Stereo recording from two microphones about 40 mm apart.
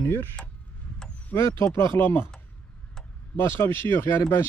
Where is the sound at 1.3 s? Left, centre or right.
Left.